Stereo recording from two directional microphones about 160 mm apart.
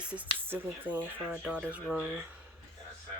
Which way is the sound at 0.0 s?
10° right (ahead or behind).